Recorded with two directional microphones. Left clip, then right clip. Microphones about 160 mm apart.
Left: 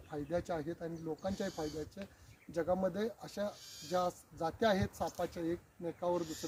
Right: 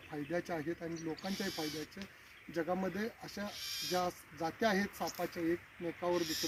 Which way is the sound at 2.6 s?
15° left (ahead or behind).